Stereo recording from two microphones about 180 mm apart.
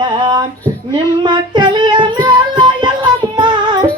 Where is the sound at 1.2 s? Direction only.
25° right (ahead or behind).